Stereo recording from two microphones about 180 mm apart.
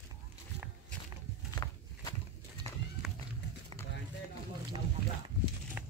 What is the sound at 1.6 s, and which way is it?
Walk, 20° left (ahead or behind).